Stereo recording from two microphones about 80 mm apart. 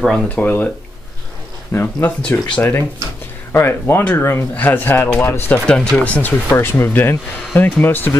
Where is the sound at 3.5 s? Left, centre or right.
Left.